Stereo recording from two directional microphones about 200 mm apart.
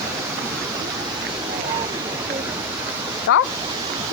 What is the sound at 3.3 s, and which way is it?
Pink noise, 90° left.